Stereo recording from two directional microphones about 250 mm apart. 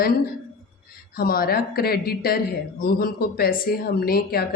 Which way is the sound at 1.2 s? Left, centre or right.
Left.